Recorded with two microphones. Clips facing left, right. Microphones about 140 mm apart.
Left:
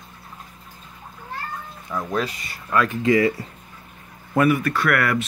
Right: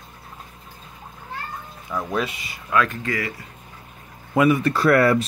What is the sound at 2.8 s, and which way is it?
Speech, 20° left (ahead or behind).